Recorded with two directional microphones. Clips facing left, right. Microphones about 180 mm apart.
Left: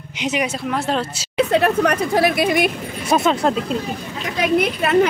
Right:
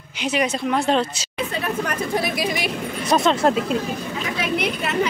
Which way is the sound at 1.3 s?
75° left (ahead or behind).